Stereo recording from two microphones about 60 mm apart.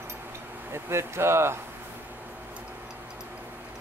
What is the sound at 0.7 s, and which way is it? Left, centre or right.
Speech, right.